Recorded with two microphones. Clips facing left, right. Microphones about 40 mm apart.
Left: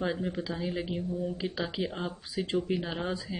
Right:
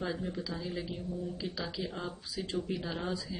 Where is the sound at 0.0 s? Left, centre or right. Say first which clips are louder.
Left 4 dB; left.